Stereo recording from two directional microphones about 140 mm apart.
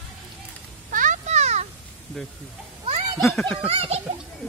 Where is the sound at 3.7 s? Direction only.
45° right (ahead or behind).